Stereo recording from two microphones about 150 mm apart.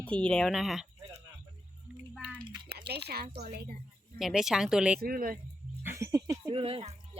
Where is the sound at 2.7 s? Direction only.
90° right.